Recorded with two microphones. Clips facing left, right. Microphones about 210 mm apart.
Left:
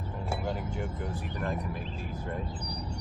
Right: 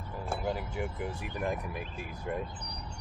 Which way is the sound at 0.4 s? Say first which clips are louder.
Right 2 dB; 5° right (ahead or behind).